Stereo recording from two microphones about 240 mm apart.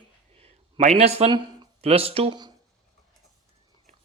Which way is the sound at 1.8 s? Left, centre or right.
Right.